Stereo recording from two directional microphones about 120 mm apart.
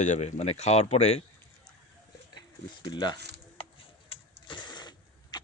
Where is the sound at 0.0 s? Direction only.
85° left; by 1.2 s 65° left (ahead or behind).